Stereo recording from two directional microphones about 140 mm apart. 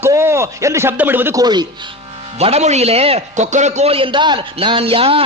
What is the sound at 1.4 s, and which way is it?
Speech, 30° right (ahead or behind).